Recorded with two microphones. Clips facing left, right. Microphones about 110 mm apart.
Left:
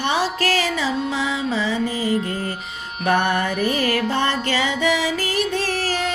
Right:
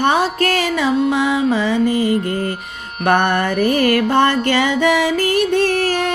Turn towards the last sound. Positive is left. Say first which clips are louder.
# right 6 dB
turn(degrees=-55)  # may be behind; listen again after turning